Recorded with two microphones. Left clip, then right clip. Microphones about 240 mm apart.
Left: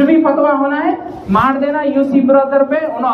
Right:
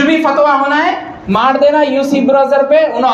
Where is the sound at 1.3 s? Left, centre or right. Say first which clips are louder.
Right 4 dB; right.